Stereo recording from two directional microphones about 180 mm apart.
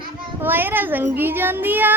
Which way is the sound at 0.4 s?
10° right (ahead or behind).